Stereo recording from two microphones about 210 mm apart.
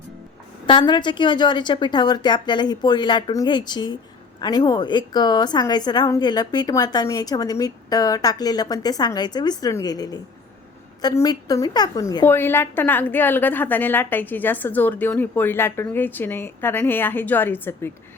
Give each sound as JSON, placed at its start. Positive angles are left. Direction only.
{"t": 0.7, "sound": "a woman's voice", "side_deg": 20}